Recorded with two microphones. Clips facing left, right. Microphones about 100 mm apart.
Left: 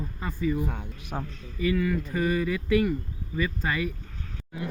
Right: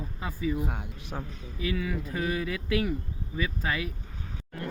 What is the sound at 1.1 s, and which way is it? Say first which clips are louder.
Speech: left 4 dB; 20° left (ahead or behind).